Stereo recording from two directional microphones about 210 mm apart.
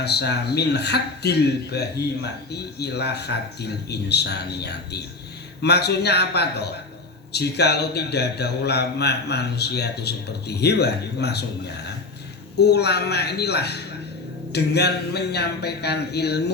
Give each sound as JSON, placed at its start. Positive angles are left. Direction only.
{"t": 0.0, "sound": "speech", "side_deg": 50}
{"t": 12.5, "sound": "speech", "side_deg": 50}